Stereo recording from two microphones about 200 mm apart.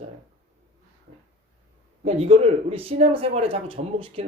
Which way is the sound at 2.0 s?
30° right (ahead or behind).